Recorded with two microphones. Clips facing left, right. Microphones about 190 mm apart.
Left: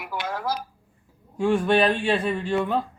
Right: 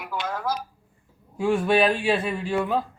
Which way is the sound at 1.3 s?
5° right (ahead or behind).